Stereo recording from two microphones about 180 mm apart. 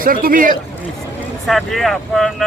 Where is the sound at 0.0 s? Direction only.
55° right (ahead or behind).